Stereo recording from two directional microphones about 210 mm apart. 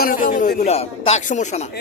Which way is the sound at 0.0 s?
40° left (ahead or behind).